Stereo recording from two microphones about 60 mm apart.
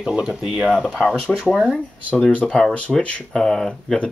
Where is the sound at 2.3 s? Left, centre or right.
Left.